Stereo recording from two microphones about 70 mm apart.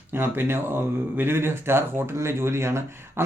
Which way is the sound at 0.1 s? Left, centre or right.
Right.